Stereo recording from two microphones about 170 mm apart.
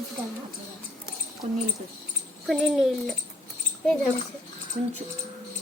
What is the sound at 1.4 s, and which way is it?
Speech, 40° right (ahead or behind).